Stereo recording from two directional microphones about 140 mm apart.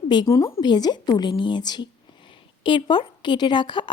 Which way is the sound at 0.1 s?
30° left (ahead or behind).